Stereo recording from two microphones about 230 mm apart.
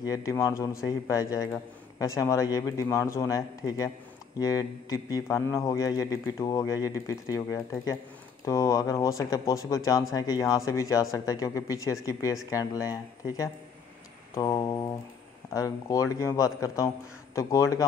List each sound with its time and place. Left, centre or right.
0.0 s a man's voice: centre